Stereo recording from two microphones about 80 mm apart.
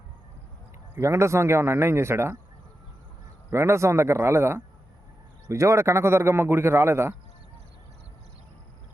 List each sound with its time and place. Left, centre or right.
0.9 s a man's voice: right
3.5 s a man's voice: right